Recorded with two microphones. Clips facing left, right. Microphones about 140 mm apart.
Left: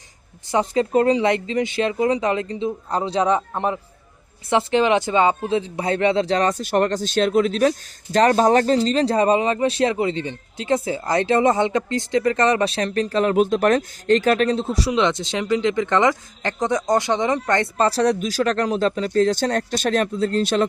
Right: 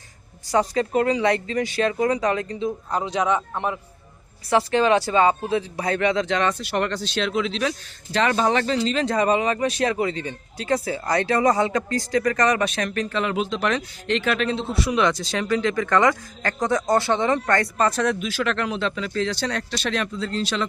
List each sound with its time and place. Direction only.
0.7 s speech: 30° left (ahead or behind)
4.4 s speech: 20° left (ahead or behind); by 14.8 s 40° left (ahead or behind)
14.8 s speech: 25° left (ahead or behind); by 20.7 s 50° left (ahead or behind)